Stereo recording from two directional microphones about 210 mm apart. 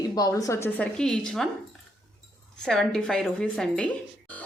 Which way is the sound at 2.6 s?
Centre (ahead or behind).